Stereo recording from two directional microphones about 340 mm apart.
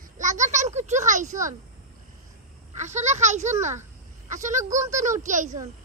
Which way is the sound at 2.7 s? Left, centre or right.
Right.